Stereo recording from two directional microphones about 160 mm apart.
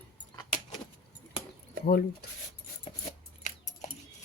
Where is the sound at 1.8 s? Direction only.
80° left.